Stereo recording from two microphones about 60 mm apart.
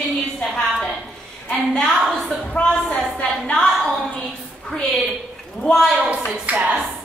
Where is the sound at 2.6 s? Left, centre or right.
Centre.